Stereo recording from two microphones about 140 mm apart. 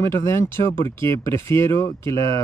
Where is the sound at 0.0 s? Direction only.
20° left (ahead or behind).